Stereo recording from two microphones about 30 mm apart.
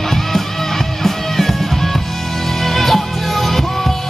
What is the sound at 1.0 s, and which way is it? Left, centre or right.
Music, centre.